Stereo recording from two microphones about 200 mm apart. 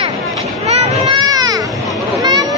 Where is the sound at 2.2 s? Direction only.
20° right (ahead or behind).